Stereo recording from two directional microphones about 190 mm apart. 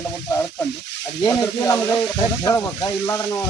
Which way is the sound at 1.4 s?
15° left (ahead or behind).